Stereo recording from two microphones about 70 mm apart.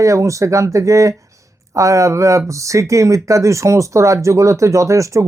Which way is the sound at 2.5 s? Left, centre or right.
Right.